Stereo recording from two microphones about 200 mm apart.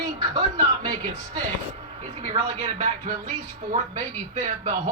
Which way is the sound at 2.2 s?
30° right (ahead or behind).